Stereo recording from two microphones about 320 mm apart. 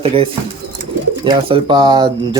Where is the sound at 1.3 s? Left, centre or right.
Centre.